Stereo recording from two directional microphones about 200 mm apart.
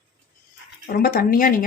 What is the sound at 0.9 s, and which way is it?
Speech, 45° left (ahead or behind).